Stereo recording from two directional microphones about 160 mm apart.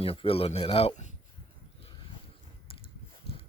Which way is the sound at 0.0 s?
35° left (ahead or behind).